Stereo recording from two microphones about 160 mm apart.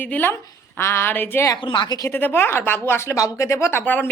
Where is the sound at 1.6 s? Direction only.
30° left (ahead or behind).